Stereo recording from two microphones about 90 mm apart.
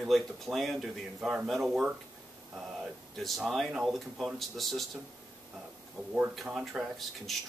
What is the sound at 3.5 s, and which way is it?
Speech, centre (ahead or behind).